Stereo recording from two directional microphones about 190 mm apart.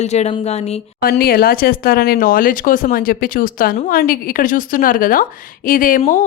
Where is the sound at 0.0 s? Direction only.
35° left (ahead or behind).